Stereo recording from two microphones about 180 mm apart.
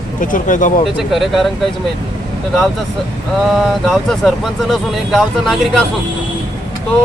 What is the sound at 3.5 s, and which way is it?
Speech, centre (ahead or behind).